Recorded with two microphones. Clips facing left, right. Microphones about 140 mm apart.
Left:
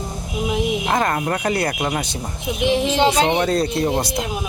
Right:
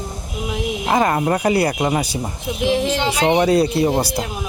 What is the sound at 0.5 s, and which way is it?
Speech, 5° right (ahead or behind).